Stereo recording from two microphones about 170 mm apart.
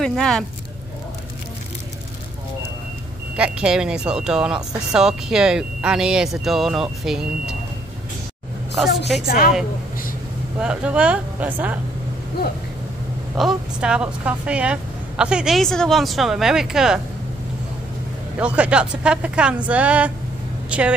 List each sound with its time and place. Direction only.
0.0 s speech: centre (ahead or behind)
3.3 s speech: 5° right (ahead or behind)
9.2 s a woman's voice: 60° left (ahead or behind)
10.6 s a woman's voice: 5° right (ahead or behind)
13.4 s speech: 5° right (ahead or behind)
18.4 s a woman's voice: 5° right (ahead or behind)